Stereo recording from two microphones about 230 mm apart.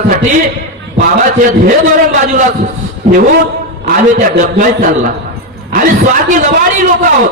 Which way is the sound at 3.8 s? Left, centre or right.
Right.